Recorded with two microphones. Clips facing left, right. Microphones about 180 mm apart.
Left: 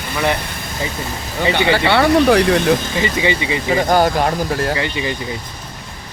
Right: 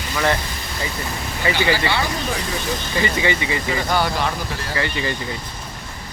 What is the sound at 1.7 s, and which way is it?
Speech, 65° left (ahead or behind).